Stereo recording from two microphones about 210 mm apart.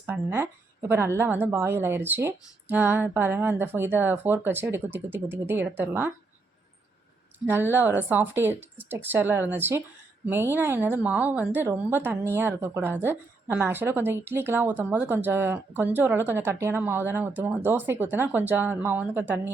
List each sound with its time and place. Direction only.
0.0 s a woman's voice: 10° right (ahead or behind)
7.3 s a woman's voice: 10° right (ahead or behind)